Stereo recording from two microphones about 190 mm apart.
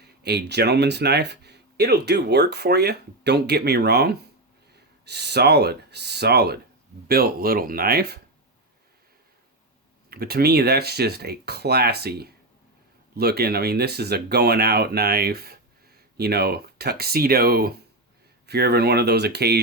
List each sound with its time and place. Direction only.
0.0 s speech: 60° right (ahead or behind)
10.1 s speech: 55° right (ahead or behind)